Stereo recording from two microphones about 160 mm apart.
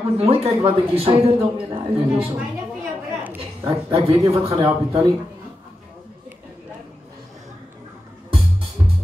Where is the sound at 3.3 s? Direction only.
35° right (ahead or behind).